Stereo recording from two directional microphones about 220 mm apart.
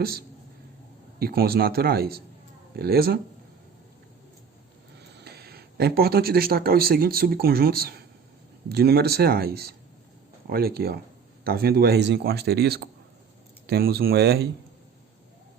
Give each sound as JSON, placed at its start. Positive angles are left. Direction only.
{"t": 1.2, "sound": "speech", "side_deg": -45}
{"t": 5.1, "sound": "speech", "side_deg": -45}